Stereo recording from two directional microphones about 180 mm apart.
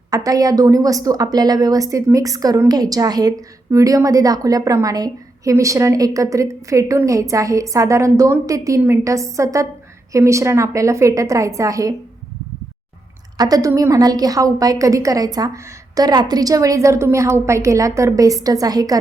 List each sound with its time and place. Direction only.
0.1 s a woman's voice: 20° right (ahead or behind)
13.3 s a woman's voice: 20° right (ahead or behind)